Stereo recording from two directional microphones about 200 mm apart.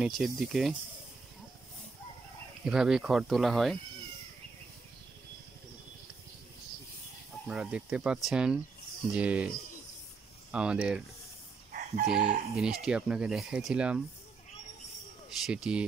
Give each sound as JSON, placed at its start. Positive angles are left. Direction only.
{"t": 0.0, "sound": "speech", "side_deg": 0}
{"t": 2.6, "sound": "speech", "side_deg": -5}
{"t": 7.4, "sound": "speech", "side_deg": -5}
{"t": 10.5, "sound": "speech", "side_deg": -5}
{"t": 11.7, "sound": "chicken", "side_deg": -45}
{"t": 12.5, "sound": "speech", "side_deg": -5}
{"t": 15.2, "sound": "speech", "side_deg": 0}